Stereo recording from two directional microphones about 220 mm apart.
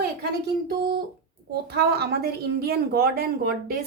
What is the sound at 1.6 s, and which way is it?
A woman's voice, 45° right (ahead or behind).